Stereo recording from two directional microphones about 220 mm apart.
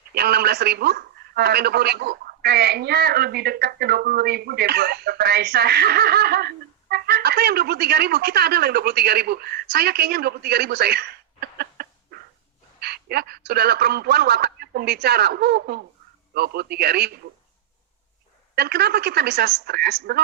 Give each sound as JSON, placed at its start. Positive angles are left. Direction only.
{"t": 0.1, "sound": "a man's voice", "side_deg": -45}
{"t": 18.5, "sound": "a man's voice", "side_deg": -45}